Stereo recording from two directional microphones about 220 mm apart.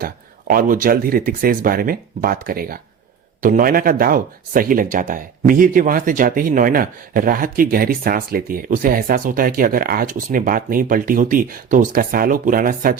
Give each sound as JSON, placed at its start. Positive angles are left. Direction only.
{"t": 0.0, "sound": "speech", "side_deg": -40}